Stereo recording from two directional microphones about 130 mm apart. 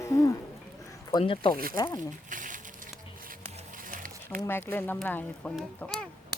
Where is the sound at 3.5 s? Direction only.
75° right (ahead or behind); by 4.1 s 90° right.